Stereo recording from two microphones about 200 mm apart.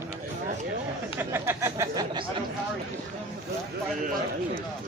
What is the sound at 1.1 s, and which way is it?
Speech, 10° right (ahead or behind).